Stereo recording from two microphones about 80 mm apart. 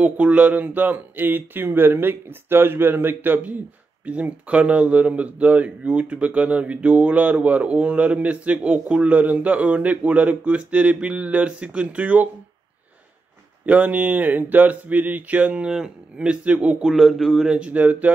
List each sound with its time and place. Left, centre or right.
0.0 s speech: centre
13.7 s speech: centre
15.5 s speech: centre
16.8 s speech: centre
17.5 s speech: centre